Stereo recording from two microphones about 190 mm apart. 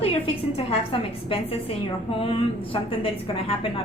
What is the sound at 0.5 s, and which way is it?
A woman's voice, 30° left (ahead or behind).